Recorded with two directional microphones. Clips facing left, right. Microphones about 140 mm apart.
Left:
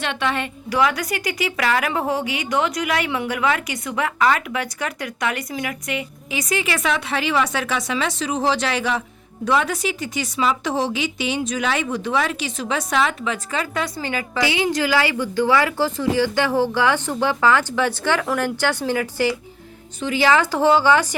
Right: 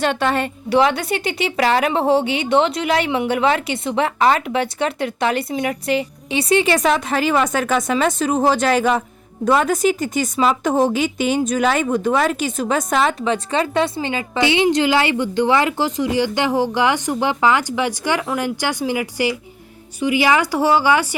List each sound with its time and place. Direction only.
0.0 s a woman's voice: 40° right (ahead or behind)
0.7 s a woman's voice: 25° right (ahead or behind); by 21.2 s 10° right (ahead or behind)